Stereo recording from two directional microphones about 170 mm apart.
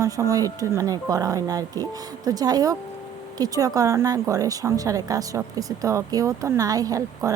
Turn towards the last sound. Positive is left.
turn(degrees=-20)  # may be behind; listen again after turning